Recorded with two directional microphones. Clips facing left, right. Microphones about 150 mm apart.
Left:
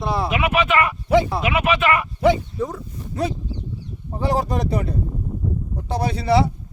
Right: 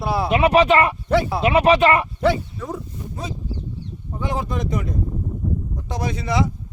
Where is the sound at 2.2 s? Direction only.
25° left (ahead or behind).